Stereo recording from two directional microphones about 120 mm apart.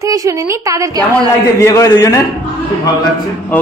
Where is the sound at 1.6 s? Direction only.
25° left (ahead or behind).